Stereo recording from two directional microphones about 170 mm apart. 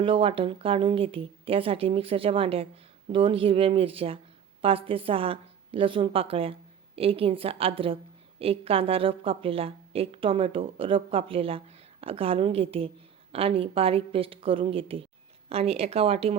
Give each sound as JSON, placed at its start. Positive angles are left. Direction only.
{"t": 0.0, "sound": "a woman's voice", "side_deg": -30}